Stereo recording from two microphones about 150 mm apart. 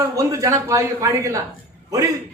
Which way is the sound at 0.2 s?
20° right (ahead or behind).